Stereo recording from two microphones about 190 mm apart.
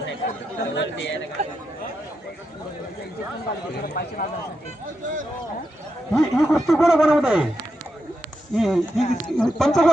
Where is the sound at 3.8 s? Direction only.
55° left (ahead or behind).